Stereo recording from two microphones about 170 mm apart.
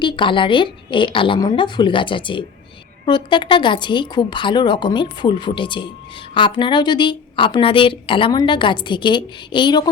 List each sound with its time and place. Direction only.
0.0 s a woman's voice: 30° left (ahead or behind)